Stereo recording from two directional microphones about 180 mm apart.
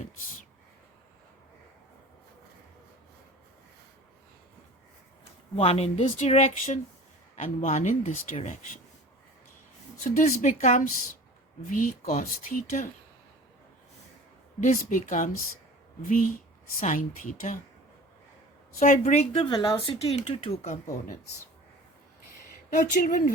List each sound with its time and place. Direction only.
5.5 s speech: 35° left (ahead or behind)
10.0 s speech: 45° left (ahead or behind)
14.6 s speech: 45° left (ahead or behind)
18.8 s speech: 40° left (ahead or behind)
22.7 s speech: 45° left (ahead or behind)